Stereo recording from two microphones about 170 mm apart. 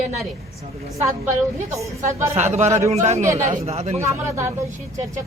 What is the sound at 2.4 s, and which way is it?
A man's voice, 40° right (ahead or behind).